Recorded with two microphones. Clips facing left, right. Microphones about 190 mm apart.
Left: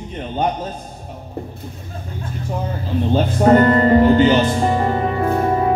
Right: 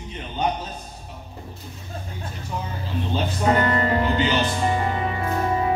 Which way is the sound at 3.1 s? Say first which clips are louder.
Left 8 dB; 45° left (ahead or behind).